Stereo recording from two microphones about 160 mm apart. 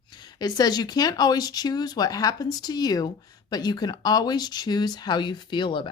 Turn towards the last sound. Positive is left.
turn(degrees=30)  # may be behind; listen again after turning